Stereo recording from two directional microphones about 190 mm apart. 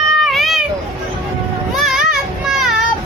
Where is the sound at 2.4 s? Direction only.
Centre (ahead or behind).